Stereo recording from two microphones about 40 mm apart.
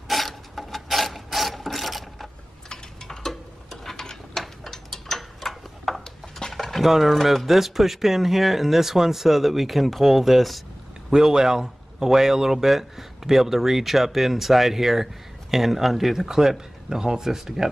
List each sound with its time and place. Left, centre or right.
0.1 s mechanisms: centre
2.7 s mechanisms: centre
6.4 s a sound: centre
6.8 s speech: centre
11.1 s speech: centre